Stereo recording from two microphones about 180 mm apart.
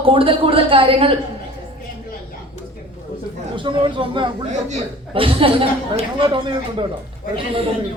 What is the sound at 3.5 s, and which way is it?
A woman's voice, 25° right (ahead or behind).